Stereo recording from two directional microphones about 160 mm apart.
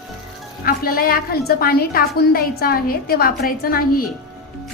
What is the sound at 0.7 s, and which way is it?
A woman's voice, 65° left (ahead or behind).